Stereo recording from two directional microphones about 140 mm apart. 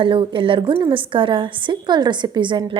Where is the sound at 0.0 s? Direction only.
35° right (ahead or behind).